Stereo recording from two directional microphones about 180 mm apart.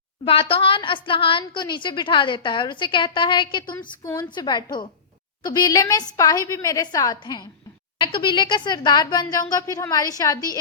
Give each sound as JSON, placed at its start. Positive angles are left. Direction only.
{"t": 0.3, "sound": "a woman's voice", "side_deg": 30}